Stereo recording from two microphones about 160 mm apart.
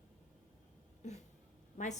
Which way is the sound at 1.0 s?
45° left (ahead or behind).